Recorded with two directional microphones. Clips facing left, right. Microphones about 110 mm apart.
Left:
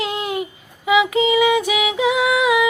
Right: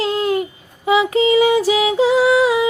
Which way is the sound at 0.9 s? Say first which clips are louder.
Right 2 dB; 35° right (ahead or behind).